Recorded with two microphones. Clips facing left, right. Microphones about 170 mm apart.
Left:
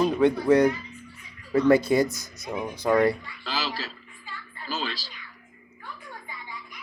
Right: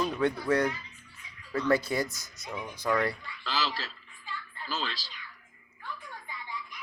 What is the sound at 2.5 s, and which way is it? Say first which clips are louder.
Speech: left 6 dB; 45° left (ahead or behind).